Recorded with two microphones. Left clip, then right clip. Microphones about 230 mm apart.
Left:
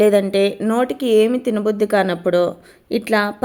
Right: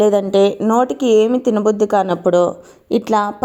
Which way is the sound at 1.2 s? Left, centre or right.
Left.